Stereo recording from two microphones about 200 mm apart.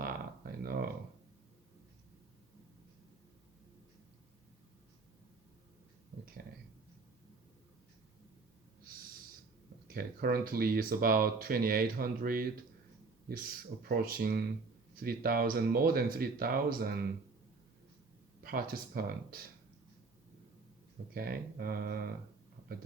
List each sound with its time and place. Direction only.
0.0 s a sound: 45° right (ahead or behind)
9.9 s speech: 50° right (ahead or behind)
18.4 s speech: 50° right (ahead or behind)
21.1 s speech: 50° right (ahead or behind)